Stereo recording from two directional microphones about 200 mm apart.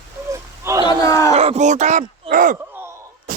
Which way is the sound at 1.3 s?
35° right (ahead or behind).